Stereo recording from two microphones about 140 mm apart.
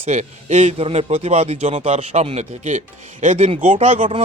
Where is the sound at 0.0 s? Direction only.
55° right (ahead or behind).